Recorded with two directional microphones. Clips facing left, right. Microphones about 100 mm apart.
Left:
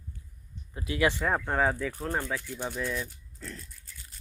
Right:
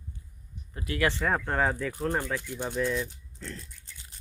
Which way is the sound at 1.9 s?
15° right (ahead or behind).